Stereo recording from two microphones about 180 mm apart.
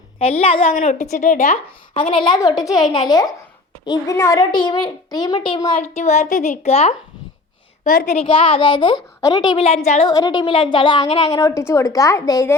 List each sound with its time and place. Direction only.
0.2 s a woman's voice: 35° left (ahead or behind)
0.7 s speech: 50° left (ahead or behind)
2.0 s a woman's voice: 30° left (ahead or behind)
5.8 s a woman's voice: 40° left (ahead or behind)
10.1 s a woman's voice: 20° left (ahead or behind)